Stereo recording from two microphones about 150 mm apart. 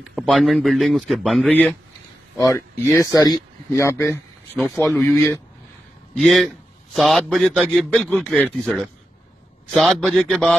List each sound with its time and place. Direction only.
0.3 s a man's voice: centre (ahead or behind)
1.5 s speech: 10° left (ahead or behind)
4.6 s a man's voice: centre (ahead or behind)
4.9 s speech: 15° left (ahead or behind)
6.1 s a man's voice: 5° left (ahead or behind)